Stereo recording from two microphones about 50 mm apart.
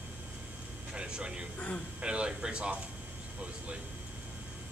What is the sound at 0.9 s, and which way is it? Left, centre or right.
Speech, centre.